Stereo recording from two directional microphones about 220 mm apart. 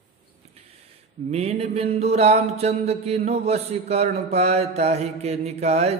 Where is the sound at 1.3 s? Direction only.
30° right (ahead or behind).